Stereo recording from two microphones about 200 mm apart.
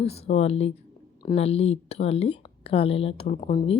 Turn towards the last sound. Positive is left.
turn(degrees=35)  # may be behind; listen again after turning